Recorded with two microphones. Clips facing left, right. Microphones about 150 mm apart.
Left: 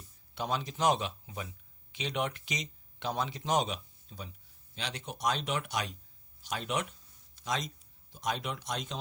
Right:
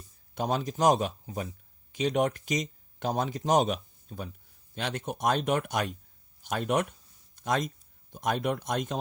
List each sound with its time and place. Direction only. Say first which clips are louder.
0.3 s speech: right 5 dB; 45° right (ahead or behind)